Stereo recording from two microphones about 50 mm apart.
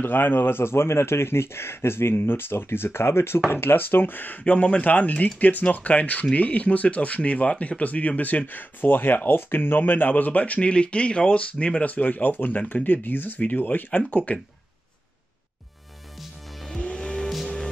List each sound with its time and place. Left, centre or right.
0.0 s speech: left
16.7 s music: left